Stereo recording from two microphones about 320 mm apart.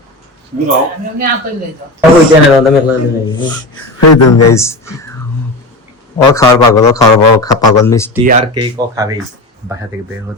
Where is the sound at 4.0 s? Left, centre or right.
Left.